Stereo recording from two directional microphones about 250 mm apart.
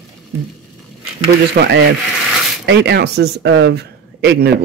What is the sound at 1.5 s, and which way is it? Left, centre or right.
Speech, right.